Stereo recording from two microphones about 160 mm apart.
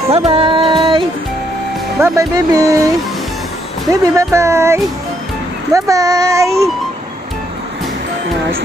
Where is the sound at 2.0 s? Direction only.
20° right (ahead or behind).